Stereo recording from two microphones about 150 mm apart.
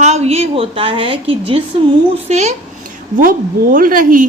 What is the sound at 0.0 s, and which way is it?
A woman's voice, 45° right (ahead or behind).